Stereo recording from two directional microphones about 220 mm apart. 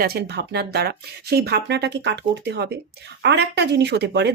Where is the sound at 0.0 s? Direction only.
45° right (ahead or behind).